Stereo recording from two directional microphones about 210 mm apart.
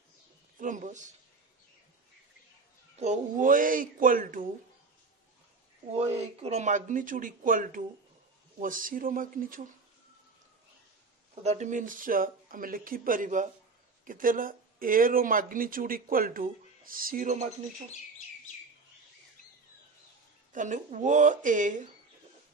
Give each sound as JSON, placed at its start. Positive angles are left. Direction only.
{"t": 0.6, "sound": "speech", "side_deg": -35}
{"t": 3.0, "sound": "speech", "side_deg": -35}
{"t": 6.1, "sound": "speech", "side_deg": -30}
{"t": 11.4, "sound": "speech", "side_deg": -35}
{"t": 20.5, "sound": "speech", "side_deg": -35}